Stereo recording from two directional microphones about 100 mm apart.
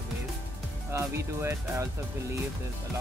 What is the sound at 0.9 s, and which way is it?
Speech, 25° right (ahead or behind).